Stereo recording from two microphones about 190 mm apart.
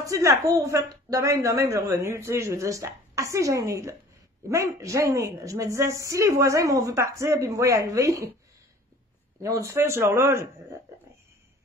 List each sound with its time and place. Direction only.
0.0 s a woman's voice: 15° right (ahead or behind)
9.4 s a woman's voice: 15° right (ahead or behind)